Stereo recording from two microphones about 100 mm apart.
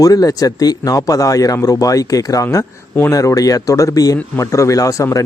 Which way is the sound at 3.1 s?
35° left (ahead or behind).